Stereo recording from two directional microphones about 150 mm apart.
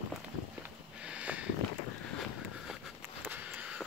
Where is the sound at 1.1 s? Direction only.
10° right (ahead or behind).